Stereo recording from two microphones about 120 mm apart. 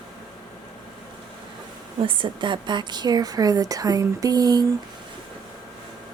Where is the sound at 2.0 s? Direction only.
45° right (ahead or behind).